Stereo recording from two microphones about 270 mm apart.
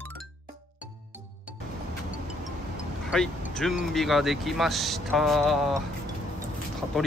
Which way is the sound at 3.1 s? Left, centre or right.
Centre.